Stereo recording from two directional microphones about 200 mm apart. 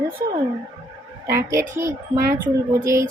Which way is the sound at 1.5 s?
15° right (ahead or behind).